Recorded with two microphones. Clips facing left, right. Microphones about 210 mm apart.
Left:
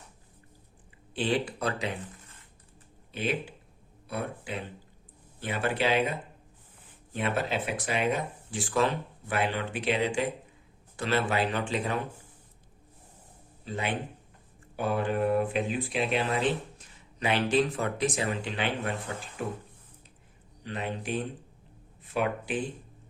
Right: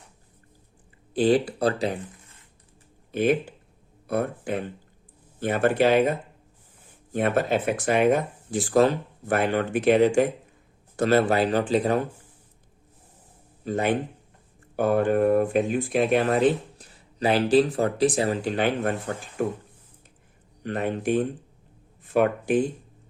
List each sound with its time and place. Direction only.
1.1 s speech: 40° right (ahead or behind)
3.1 s speech: 50° right (ahead or behind)
13.7 s speech: 45° right (ahead or behind)
20.7 s speech: 50° right (ahead or behind)